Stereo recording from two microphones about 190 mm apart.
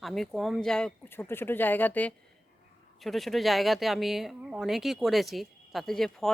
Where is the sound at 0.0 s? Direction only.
Centre (ahead or behind).